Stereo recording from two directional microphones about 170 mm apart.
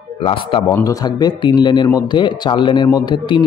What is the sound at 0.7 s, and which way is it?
A man's voice, 20° left (ahead or behind).